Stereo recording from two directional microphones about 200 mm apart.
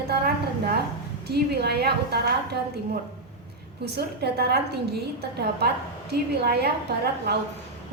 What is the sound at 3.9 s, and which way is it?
Speech, 55° right (ahead or behind).